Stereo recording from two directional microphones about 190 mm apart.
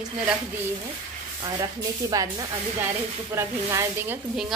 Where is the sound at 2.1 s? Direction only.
20° right (ahead or behind).